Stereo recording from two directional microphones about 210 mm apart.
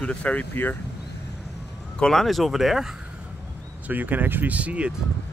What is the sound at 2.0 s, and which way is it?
Speech, centre (ahead or behind).